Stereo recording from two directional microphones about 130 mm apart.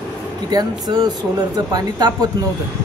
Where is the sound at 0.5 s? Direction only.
30° right (ahead or behind).